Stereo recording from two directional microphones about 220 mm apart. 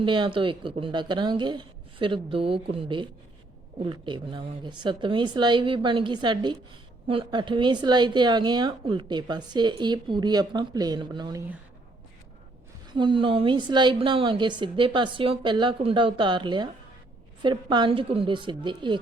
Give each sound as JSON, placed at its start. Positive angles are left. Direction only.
{"t": 0.0, "sound": "a woman's voice", "side_deg": -20}
{"t": 12.9, "sound": "a woman's voice", "side_deg": -20}